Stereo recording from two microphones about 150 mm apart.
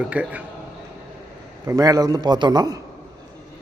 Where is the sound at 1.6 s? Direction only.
25° right (ahead or behind).